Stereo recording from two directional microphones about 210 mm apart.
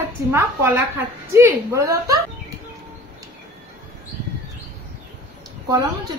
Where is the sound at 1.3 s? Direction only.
15° right (ahead or behind).